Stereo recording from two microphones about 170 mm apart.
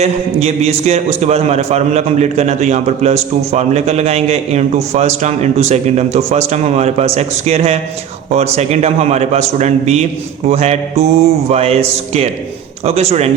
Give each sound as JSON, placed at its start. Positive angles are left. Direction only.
{"t": 0.0, "sound": "a man's voice", "side_deg": -40}